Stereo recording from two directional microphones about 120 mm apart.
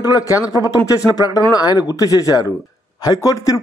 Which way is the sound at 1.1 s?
30° left (ahead or behind).